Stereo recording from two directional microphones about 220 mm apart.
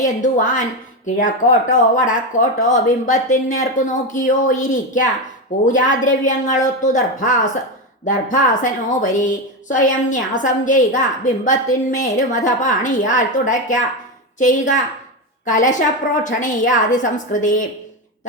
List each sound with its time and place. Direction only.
0.0 s a woman's voice: 35° left (ahead or behind)